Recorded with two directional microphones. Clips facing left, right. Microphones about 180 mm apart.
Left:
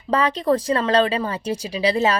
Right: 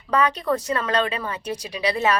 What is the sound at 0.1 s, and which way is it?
Speech, 30° left (ahead or behind).